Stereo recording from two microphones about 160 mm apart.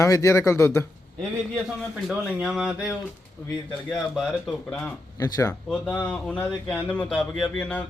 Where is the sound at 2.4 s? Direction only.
5° right (ahead or behind).